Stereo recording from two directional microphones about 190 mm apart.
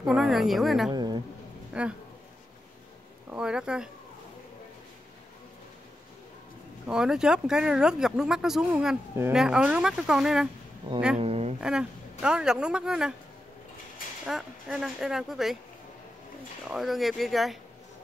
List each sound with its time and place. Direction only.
0.0 s a woman's voice: centre (ahead or behind)
0.9 s a sound: 20° right (ahead or behind)
1.7 s speech: 5° right (ahead or behind)
3.3 s speech: 5° right (ahead or behind)
6.9 s speech: 5° right (ahead or behind)
11.1 s a sound: 35° right (ahead or behind)
11.6 s speech: 5° right (ahead or behind)
14.2 s speech: centre (ahead or behind)
16.6 s speech: centre (ahead or behind)